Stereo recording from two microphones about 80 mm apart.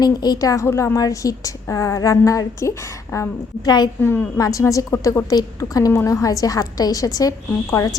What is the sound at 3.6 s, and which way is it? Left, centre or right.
Speech, left.